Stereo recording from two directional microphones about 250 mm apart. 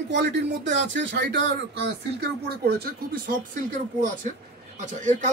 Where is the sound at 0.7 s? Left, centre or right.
Right.